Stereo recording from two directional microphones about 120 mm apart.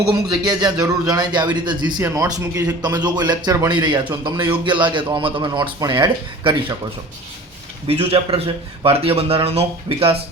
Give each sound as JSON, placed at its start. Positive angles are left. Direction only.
{"t": 0.1, "sound": "a man's voice", "side_deg": -35}
{"t": 7.9, "sound": "a man's voice", "side_deg": -55}